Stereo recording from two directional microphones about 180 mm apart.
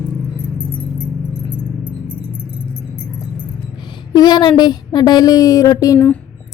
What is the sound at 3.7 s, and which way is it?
A woman's voice, 25° left (ahead or behind).